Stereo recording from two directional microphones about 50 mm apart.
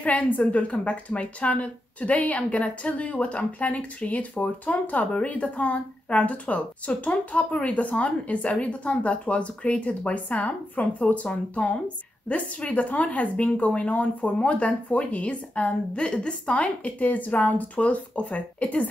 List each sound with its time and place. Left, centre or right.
0.0 s speech: left